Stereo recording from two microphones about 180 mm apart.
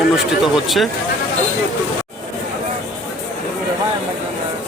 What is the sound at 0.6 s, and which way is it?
Speech, centre (ahead or behind).